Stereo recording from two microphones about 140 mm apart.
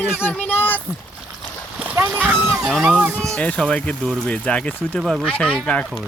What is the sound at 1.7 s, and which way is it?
Splash, 10° right (ahead or behind).